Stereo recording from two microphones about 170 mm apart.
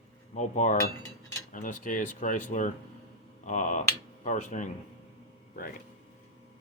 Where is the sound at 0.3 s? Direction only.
45° left (ahead or behind).